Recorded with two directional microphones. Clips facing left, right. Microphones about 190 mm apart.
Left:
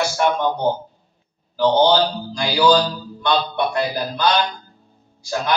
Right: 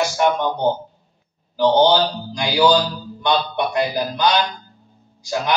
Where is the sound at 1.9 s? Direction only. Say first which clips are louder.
Even; 15° right (ahead or behind).